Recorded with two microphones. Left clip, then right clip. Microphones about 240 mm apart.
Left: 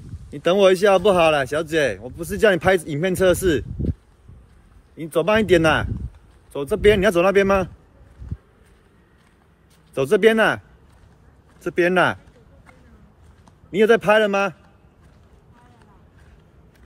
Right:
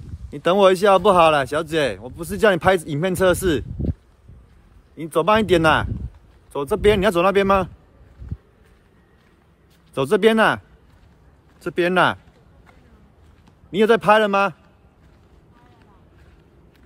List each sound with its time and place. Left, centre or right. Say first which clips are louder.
0.3 s speech: even; centre
4.9 s speech: right 1 dB; centre
9.9 s speech: even; centre
11.6 s speech: even; centre
13.7 s speech: even; centre